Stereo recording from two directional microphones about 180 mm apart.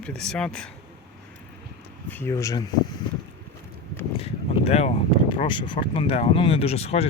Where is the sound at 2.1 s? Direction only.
15° left (ahead or behind).